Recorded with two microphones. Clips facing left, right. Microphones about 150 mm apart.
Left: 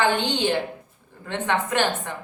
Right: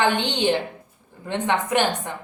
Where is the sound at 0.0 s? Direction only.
20° right (ahead or behind).